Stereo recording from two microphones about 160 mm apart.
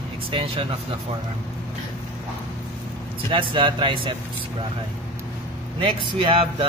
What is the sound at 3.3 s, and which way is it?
Speech, 30° right (ahead or behind).